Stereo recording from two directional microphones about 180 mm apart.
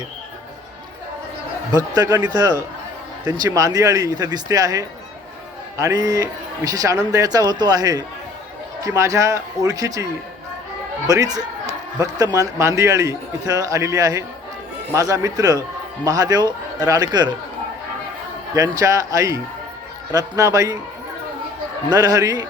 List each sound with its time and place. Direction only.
2.0 s a man's voice: 20° right (ahead or behind)
18.5 s speech: 20° right (ahead or behind)
21.8 s speech: 20° right (ahead or behind)